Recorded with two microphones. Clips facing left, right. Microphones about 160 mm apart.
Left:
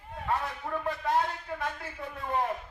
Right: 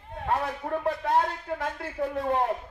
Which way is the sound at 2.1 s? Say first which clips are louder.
Right 5 dB; 75° right (ahead or behind).